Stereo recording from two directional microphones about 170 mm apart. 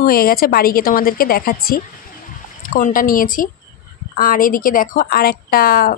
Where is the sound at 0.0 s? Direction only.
60° left (ahead or behind).